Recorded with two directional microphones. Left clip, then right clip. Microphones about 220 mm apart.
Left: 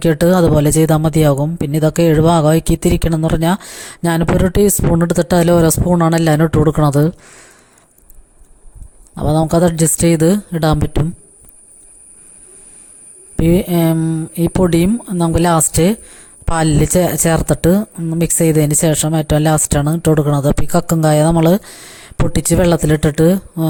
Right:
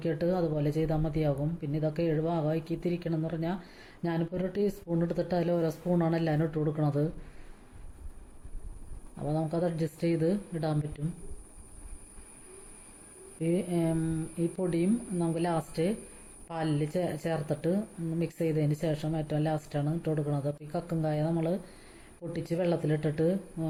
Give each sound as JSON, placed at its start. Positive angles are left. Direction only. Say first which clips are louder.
{"t": 0.0, "sound": "speech", "louder": "left 18 dB", "side_deg": 45}
{"t": 9.1, "sound": "speech", "louder": "left 18 dB", "side_deg": 45}
{"t": 13.4, "sound": "speech", "louder": "left 16 dB", "side_deg": 50}